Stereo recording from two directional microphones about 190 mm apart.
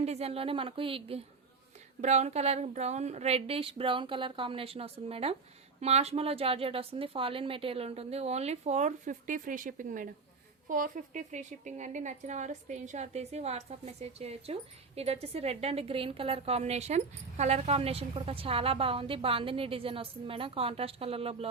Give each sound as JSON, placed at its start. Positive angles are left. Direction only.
{"t": 0.0, "sound": "a woman's voice", "side_deg": -35}